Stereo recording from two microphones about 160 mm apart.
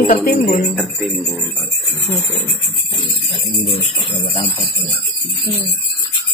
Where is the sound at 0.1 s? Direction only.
65° left (ahead or behind).